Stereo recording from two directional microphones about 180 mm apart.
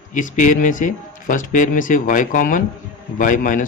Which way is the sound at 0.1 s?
45° left (ahead or behind).